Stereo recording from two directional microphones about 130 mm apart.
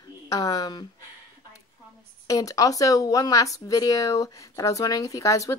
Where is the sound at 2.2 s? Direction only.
25° left (ahead or behind).